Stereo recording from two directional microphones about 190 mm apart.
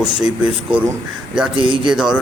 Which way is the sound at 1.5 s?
25° right (ahead or behind).